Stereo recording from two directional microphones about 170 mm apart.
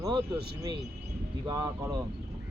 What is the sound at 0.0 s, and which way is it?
Speech, 25° right (ahead or behind).